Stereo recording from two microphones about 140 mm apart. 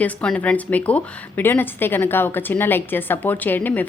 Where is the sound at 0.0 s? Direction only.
10° left (ahead or behind).